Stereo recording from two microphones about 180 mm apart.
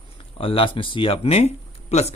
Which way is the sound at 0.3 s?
30° left (ahead or behind).